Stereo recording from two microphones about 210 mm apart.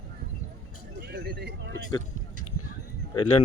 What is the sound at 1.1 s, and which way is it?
Vehicle, 50° right (ahead or behind).